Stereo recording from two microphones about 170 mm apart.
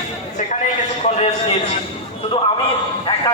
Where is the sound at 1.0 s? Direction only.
40° left (ahead or behind).